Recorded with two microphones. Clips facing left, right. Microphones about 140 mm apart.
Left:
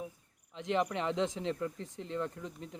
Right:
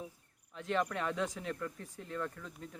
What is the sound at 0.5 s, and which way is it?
Speech, 20° left (ahead or behind).